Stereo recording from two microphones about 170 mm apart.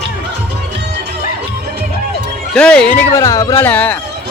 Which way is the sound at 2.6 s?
5° left (ahead or behind).